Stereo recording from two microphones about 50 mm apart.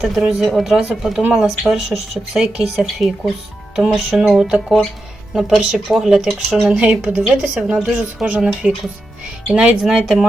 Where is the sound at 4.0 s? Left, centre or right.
Centre.